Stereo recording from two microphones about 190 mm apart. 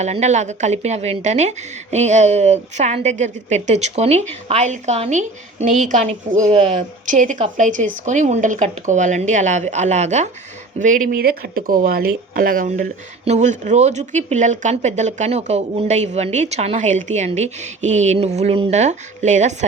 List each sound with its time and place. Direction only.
0.0 s speech: 35° right (ahead or behind)
5.6 s a woman's voice: centre (ahead or behind)
5.9 s speech: 40° right (ahead or behind)